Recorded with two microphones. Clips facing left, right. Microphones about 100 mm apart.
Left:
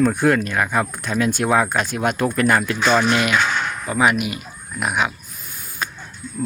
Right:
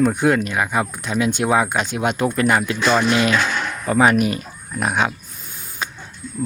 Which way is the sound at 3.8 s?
40° right (ahead or behind).